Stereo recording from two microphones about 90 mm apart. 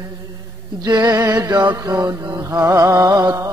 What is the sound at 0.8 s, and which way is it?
Mantra, 50° right (ahead or behind).